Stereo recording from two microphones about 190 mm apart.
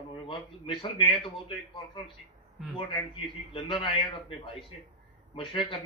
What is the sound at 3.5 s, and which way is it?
Speech, 30° left (ahead or behind).